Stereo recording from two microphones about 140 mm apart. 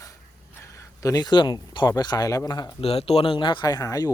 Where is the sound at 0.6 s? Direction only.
20° left (ahead or behind).